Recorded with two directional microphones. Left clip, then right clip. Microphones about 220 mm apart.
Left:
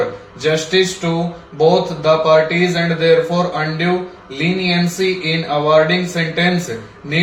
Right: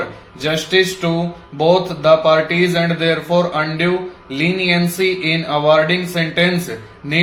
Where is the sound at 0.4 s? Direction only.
45° right (ahead or behind).